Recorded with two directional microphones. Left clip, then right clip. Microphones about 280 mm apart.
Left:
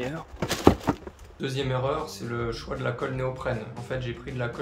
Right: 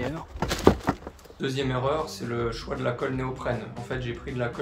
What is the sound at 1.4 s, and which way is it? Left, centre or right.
Speech, centre.